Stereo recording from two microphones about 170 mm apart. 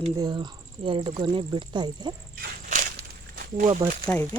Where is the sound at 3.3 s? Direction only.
50° right (ahead or behind).